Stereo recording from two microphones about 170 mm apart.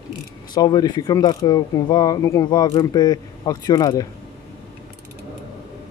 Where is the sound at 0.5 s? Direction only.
25° left (ahead or behind).